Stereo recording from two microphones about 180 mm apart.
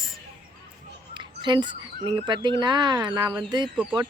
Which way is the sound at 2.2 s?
25° right (ahead or behind).